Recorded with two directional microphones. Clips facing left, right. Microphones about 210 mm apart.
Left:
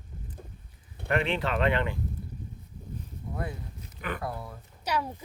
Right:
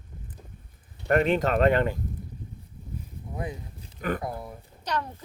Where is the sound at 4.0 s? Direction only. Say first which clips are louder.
Right 6 dB; 40° right (ahead or behind).